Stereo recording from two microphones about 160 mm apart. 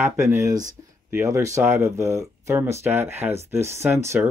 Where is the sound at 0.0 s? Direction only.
15° right (ahead or behind).